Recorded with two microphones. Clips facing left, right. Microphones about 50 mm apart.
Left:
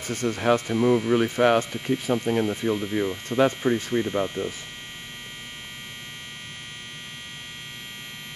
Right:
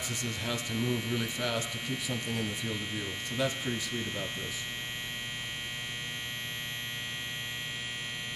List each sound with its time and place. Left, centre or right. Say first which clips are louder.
0.0 s speech: left 11 dB; left